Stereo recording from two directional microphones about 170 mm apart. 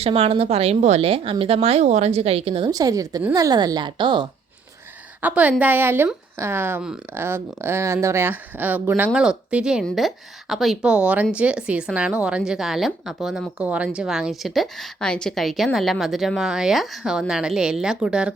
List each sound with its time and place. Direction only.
0.0 s speech: 35° right (ahead or behind)
2.6 s a woman's voice: 20° right (ahead or behind)
5.2 s speech: 10° right (ahead or behind)